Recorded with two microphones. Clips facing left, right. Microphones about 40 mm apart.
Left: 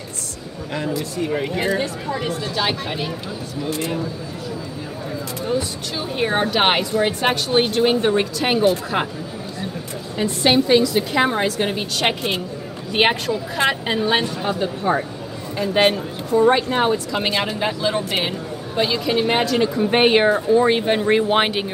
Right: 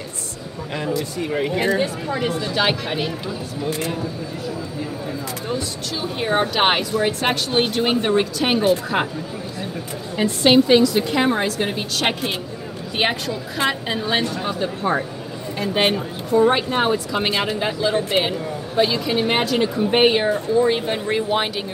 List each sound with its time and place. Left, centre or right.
0.7 s a woman's voice: centre
5.5 s a woman's voice: centre
10.1 s a woman's voice: centre
12.9 s a woman's voice: centre
16.5 s a woman's voice: centre
20.0 s speech: left